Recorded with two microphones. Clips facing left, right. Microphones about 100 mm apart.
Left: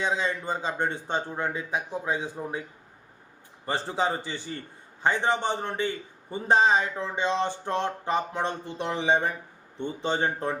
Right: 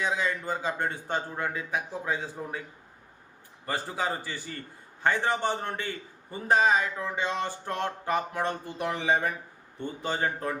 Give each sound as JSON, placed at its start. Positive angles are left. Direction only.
{"t": 0.0, "sound": "a man's voice", "side_deg": 25}
{"t": 3.7, "sound": "a man's voice", "side_deg": 25}